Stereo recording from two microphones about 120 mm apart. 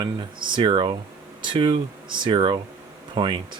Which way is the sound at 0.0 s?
40° right (ahead or behind).